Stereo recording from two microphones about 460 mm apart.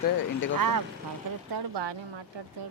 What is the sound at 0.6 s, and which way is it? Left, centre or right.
Speech, right.